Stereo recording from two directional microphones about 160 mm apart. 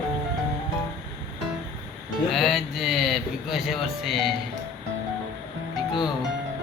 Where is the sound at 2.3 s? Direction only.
Centre (ahead or behind).